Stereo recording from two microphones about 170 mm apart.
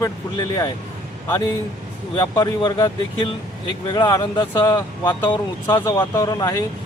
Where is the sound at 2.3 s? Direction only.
25° left (ahead or behind).